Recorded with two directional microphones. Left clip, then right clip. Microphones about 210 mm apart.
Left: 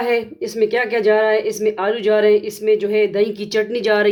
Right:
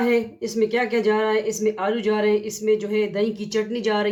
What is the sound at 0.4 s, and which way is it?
Speech, 35° left (ahead or behind).